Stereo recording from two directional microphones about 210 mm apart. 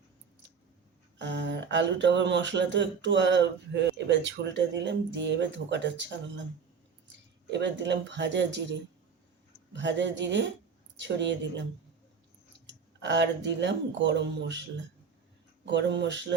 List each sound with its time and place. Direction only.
1.2 s speech: 60° right (ahead or behind)
7.5 s speech: 55° right (ahead or behind)
9.7 s speech: 60° right (ahead or behind)
12.6 s speech: 55° right (ahead or behind)